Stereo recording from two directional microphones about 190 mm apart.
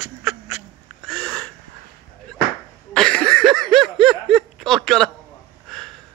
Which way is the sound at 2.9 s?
5° left (ahead or behind).